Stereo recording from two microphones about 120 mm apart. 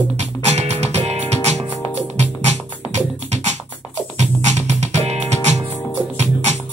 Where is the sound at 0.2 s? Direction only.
65° right (ahead or behind).